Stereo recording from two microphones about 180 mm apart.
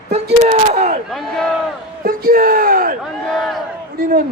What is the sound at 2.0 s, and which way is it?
Speech, 55° right (ahead or behind).